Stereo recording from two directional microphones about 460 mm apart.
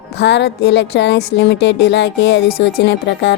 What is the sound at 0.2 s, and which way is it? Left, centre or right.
A woman's voice, left.